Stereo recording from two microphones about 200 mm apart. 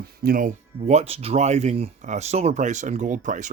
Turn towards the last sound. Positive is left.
turn(degrees=-40)  # may be behind; listen again after turning